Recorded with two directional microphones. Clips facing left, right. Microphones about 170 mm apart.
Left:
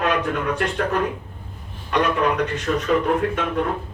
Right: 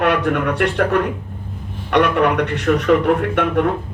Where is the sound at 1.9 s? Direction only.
70° right (ahead or behind).